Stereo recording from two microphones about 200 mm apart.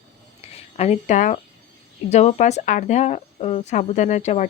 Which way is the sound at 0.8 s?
35° left (ahead or behind).